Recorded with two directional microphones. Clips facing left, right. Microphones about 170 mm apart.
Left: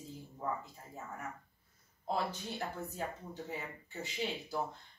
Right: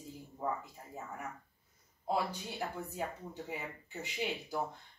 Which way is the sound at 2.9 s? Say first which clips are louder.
Right 1 dB; 15° right (ahead or behind).